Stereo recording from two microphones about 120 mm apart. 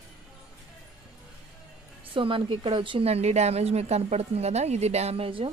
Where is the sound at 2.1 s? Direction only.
45° right (ahead or behind).